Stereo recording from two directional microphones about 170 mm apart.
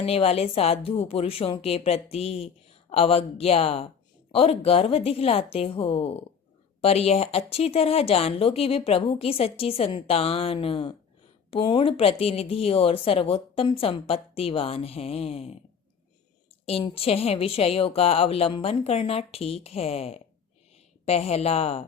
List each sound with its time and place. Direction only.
0.0 s speech: 35° left (ahead or behind)
16.6 s speech: 35° left (ahead or behind)